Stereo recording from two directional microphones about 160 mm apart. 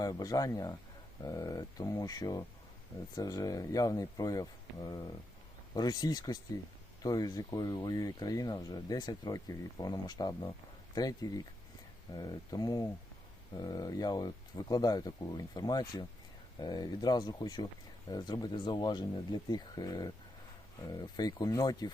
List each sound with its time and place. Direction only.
0.0 s speech: 25° left (ahead or behind)
5.7 s speech: 25° left (ahead or behind)